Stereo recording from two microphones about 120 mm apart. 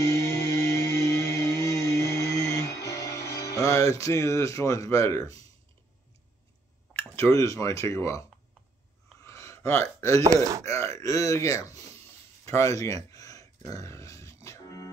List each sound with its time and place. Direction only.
0.0 s music: 30° left (ahead or behind)
7.2 s speech: 25° left (ahead or behind)
9.2 s a sound: 25° left (ahead or behind)
9.9 s speech: 25° left (ahead or behind)
10.3 s speech: 30° right (ahead or behind)
10.7 s speech: 25° left (ahead or behind)
12.4 s a sound: 25° left (ahead or behind)
13.7 s music: 25° left (ahead or behind)